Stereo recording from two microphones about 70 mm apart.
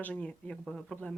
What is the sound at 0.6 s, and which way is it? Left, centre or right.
Speech, centre.